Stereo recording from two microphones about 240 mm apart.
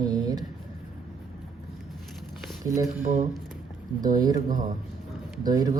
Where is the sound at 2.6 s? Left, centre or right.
Centre.